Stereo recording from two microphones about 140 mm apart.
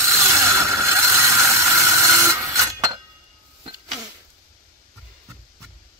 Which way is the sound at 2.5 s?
25° right (ahead or behind).